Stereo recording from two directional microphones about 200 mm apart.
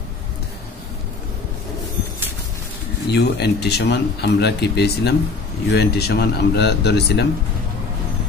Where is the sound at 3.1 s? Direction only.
55° left (ahead or behind).